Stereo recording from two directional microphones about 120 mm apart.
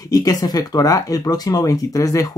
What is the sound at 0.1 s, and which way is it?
Speech, 30° left (ahead or behind).